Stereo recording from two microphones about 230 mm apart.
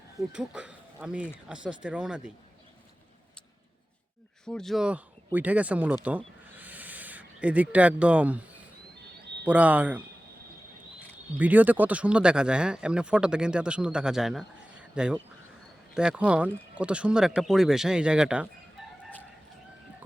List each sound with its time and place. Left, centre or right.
0.3 s speech: centre
4.4 s speech: centre
6.1 s owl: centre
9.5 s speech: centre
11.3 s speech: centre